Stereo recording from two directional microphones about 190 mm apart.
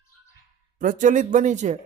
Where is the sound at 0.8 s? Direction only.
45° right (ahead or behind).